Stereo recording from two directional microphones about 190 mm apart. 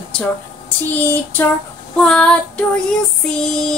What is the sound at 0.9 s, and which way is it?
Female singing, 10° left (ahead or behind).